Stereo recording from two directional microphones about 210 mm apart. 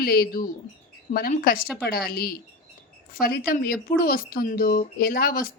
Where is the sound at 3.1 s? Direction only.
45° left (ahead or behind).